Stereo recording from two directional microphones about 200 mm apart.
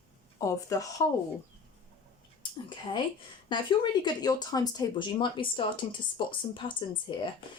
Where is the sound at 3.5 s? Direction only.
20° left (ahead or behind).